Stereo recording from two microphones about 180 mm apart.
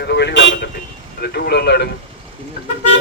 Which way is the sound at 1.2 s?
60° left (ahead or behind).